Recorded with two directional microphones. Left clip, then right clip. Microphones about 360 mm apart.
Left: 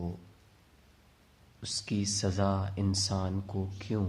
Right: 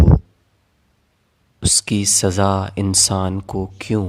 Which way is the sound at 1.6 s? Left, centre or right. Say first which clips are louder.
Right 16 dB; right.